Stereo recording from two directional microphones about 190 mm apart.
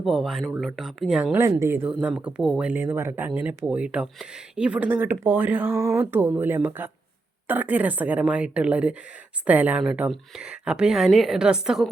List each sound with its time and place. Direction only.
0.0 s speech: centre (ahead or behind)